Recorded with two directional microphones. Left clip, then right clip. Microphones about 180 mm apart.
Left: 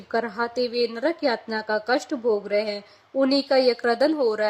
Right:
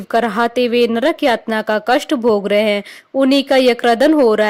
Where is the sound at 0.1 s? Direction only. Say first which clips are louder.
Right 10 dB; 40° right (ahead or behind).